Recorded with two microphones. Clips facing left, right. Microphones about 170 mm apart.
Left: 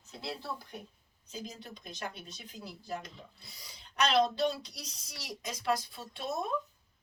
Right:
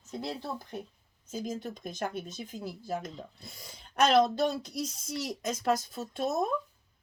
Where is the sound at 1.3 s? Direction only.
50° right (ahead or behind).